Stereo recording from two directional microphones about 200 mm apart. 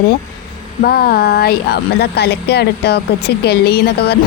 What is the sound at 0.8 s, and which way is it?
A woman's voice, 50° left (ahead or behind).